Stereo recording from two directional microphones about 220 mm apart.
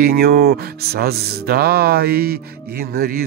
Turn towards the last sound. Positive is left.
turn(degrees=-45)  # may be behind; listen again after turning